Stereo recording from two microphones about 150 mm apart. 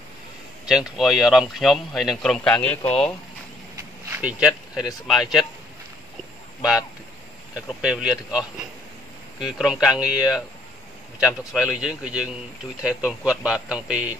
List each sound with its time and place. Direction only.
0.7 s speech: 5° right (ahead or behind)
3.7 s a sound: 10° right (ahead or behind)
5.0 s speech: centre (ahead or behind)
7.5 s a man's voice: 5° right (ahead or behind)